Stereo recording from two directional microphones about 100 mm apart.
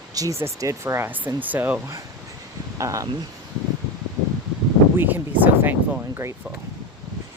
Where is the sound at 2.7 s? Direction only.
35° right (ahead or behind).